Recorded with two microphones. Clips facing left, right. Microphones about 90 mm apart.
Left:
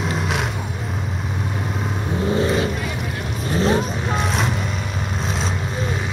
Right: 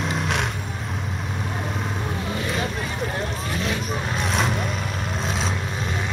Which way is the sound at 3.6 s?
35° left (ahead or behind).